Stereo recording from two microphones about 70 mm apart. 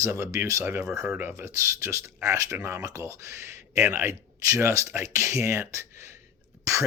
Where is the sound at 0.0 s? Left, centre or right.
Right.